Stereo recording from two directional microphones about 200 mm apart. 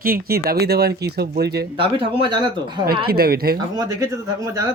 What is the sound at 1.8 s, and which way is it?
Speech, 25° right (ahead or behind).